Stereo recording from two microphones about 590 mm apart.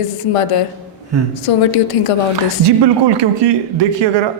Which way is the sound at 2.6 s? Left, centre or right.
Right.